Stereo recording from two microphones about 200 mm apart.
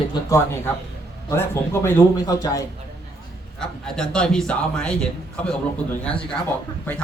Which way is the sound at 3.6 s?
5° left (ahead or behind).